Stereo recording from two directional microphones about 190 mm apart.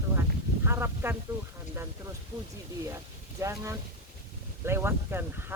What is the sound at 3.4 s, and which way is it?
Speech, 15° right (ahead or behind).